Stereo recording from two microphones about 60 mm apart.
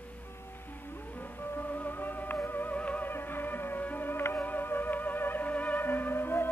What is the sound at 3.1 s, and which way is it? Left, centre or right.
Music, left.